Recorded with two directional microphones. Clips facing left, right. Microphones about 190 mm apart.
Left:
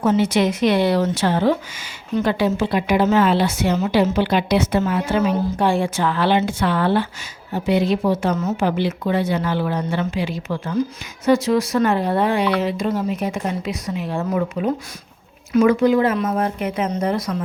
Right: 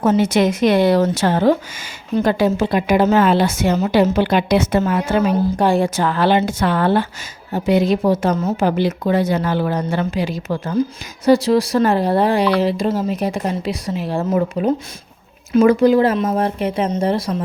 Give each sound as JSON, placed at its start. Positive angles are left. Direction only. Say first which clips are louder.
{"t": 0.0, "sound": "a woman's voice", "louder": "right 2 dB", "side_deg": -45}
{"t": 16.1, "sound": "speech", "louder": "right 3 dB", "side_deg": -25}